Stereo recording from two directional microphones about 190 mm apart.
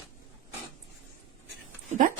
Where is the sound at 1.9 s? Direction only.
40° right (ahead or behind).